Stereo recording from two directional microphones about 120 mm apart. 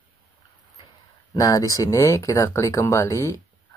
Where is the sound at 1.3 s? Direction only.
30° left (ahead or behind).